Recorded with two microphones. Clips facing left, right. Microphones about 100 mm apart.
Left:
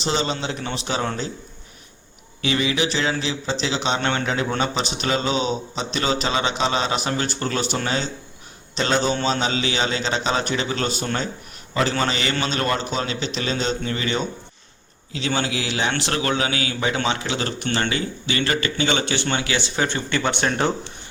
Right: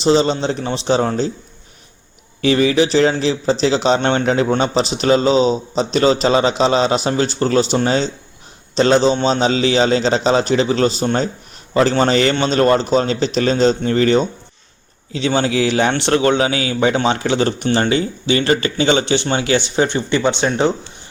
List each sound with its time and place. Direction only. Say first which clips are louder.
0.0 s a man's voice: right 9 dB; 35° right (ahead or behind)
2.4 s a man's voice: right 8 dB; 35° right (ahead or behind)
15.4 s a man's voice: right 10 dB; 35° right (ahead or behind)